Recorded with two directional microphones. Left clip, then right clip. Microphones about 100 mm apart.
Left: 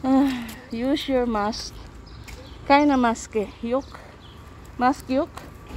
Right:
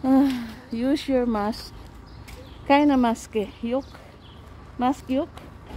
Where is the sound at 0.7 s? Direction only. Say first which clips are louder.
Even; 40° right (ahead or behind).